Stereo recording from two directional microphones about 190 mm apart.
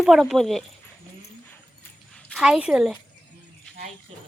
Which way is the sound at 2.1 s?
5° left (ahead or behind).